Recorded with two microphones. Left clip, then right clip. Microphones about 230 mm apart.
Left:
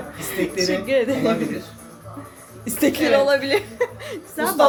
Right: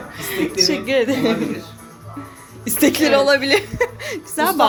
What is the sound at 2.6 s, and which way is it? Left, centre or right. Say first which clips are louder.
A woman's voice: right 3 dB; centre.